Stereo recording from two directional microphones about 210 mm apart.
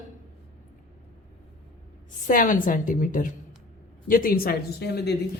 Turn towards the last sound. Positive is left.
turn(degrees=50)  # may be behind; listen again after turning